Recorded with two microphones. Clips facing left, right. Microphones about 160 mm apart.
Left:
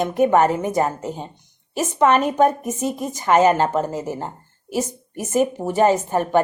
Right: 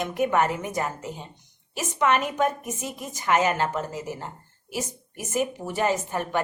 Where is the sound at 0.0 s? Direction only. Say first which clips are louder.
Left 7 dB; 30° left (ahead or behind).